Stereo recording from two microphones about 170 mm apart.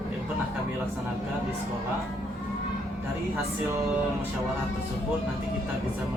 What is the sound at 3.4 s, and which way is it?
Music, 15° right (ahead or behind).